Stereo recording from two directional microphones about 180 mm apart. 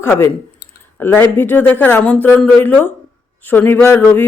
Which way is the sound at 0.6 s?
70° left (ahead or behind).